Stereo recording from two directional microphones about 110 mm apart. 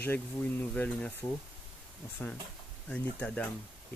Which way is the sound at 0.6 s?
10° left (ahead or behind).